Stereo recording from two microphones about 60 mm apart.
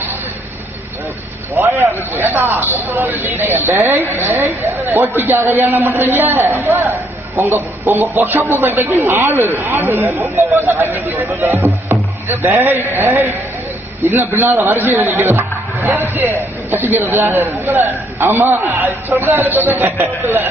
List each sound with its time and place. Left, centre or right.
1.5 s a man's voice: right
7.3 s a man's voice: right
12.4 s a man's voice: right